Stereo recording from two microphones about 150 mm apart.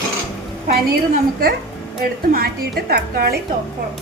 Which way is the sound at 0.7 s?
90° right.